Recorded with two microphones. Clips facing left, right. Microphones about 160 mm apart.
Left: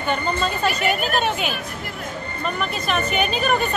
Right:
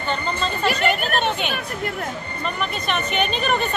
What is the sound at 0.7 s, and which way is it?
Speech, 5° left (ahead or behind).